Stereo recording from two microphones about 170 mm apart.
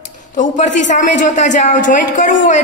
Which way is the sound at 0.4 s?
45° left (ahead or behind).